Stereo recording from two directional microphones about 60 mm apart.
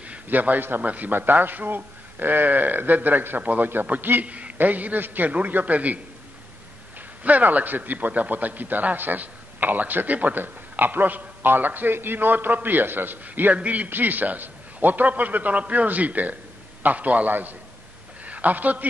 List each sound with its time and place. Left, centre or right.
0.0 s a man's voice: right
7.0 s a man's voice: right